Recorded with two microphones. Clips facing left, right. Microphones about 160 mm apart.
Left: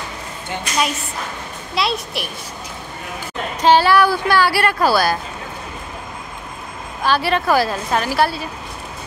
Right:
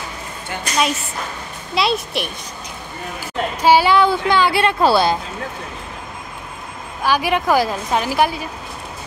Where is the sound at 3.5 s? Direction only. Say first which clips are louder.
Even; 10° right (ahead or behind).